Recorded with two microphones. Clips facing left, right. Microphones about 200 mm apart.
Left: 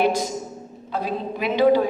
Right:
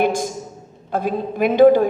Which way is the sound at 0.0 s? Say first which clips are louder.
Right 2 dB; 50° right (ahead or behind).